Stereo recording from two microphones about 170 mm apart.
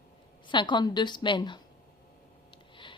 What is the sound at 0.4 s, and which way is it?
A woman's voice, 25° left (ahead or behind).